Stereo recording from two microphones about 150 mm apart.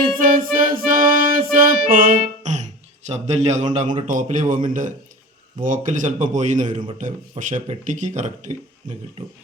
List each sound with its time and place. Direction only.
0.2 s music: 65° right (ahead or behind); by 3.9 s 50° right (ahead or behind)
4.0 s speech: 55° right (ahead or behind)